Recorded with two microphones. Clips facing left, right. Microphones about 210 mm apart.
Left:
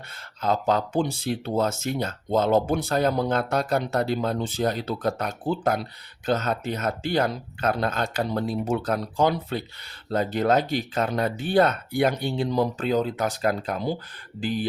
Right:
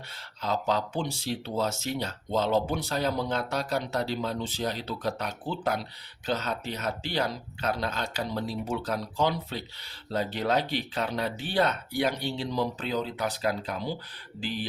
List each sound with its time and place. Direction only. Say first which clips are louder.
0.4 s speech: left 5 dB; 50° left (ahead or behind)